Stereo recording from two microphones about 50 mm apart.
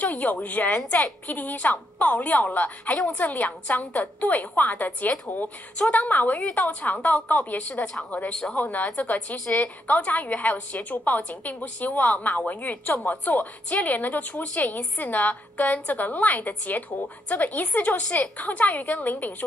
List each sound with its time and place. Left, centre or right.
0.0 s a woman's voice: left
8.3 s speech: centre
8.5 s a woman's voice: left